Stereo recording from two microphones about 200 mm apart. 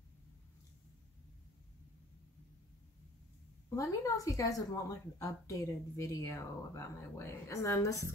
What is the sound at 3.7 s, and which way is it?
A woman's voice, 15° left (ahead or behind).